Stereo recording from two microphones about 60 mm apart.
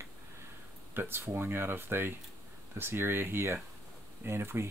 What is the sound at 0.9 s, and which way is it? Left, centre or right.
Speech, right.